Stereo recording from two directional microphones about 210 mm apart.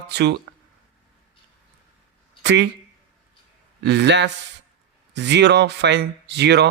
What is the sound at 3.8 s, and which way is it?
Speech, 55° right (ahead or behind).